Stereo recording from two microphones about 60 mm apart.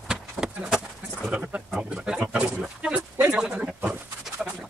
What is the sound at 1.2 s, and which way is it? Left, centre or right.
Bird, centre.